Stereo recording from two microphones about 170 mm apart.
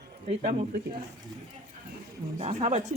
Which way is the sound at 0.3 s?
45° right (ahead or behind).